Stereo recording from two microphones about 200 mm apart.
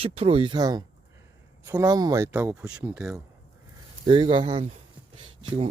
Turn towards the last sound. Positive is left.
turn(degrees=-25)  # may be behind; listen again after turning